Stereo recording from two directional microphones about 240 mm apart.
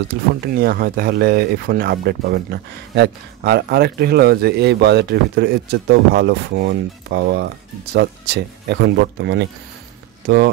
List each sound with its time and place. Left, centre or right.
0.5 s speech: right